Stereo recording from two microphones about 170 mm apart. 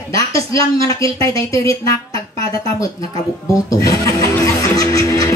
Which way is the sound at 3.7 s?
20° left (ahead or behind).